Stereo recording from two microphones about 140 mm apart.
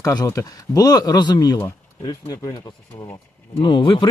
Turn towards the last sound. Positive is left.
turn(degrees=35)  # may be behind; listen again after turning